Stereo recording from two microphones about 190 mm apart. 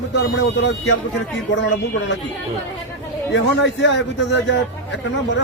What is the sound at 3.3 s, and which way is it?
A man's voice, 70° left (ahead or behind).